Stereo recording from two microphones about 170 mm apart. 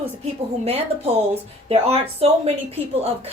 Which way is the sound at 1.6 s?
35° right (ahead or behind).